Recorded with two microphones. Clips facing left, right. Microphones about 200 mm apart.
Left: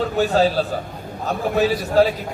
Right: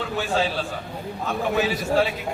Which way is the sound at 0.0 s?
40° left (ahead or behind).